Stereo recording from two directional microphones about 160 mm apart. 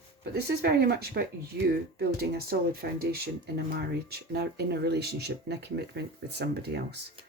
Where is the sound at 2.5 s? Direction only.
80° right.